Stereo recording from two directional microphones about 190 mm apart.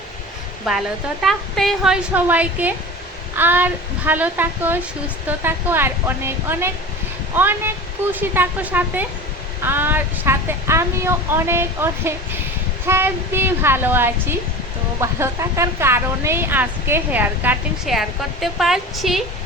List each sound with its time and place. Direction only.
1.2 s a woman's voice: centre (ahead or behind)